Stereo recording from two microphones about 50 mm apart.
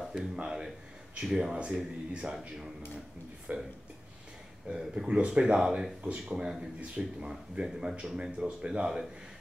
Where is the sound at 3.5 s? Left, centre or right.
Right.